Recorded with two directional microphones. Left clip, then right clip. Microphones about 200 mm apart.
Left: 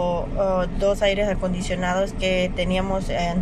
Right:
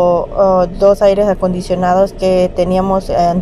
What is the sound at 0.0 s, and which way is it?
Speech, 25° right (ahead or behind).